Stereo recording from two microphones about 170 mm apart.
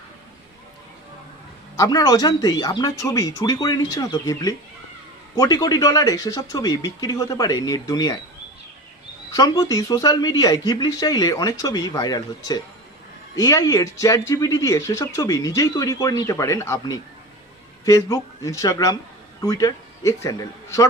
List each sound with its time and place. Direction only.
1.7 s speech: 20° left (ahead or behind)
9.3 s a man's voice: 20° left (ahead or behind)